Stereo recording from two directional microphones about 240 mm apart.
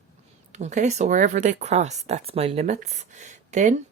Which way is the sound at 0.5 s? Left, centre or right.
Right.